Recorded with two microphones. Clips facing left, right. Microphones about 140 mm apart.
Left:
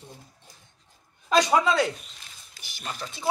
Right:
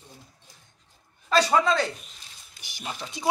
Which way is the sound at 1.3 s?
15° left (ahead or behind).